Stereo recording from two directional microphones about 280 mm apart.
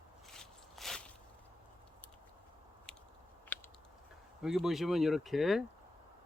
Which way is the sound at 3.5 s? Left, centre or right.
Centre.